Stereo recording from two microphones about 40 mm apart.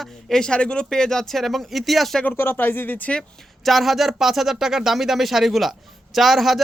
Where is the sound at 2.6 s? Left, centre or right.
Left.